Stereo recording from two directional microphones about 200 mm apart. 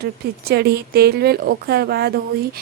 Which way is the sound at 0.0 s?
50° right (ahead or behind).